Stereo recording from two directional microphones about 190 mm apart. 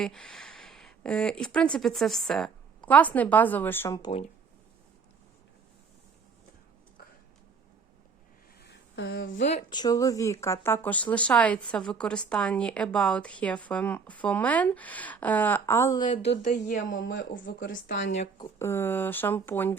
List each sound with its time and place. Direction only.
0.0 s speech: 5° left (ahead or behind); by 4.2 s 20° left (ahead or behind)
8.6 s a sound: 65° left (ahead or behind)
9.6 s a woman's voice: 20° left (ahead or behind)
16.4 s speech: 40° left (ahead or behind)
17.3 s speech: 75° left (ahead or behind)
18.3 s a woman's voice: 15° left (ahead or behind)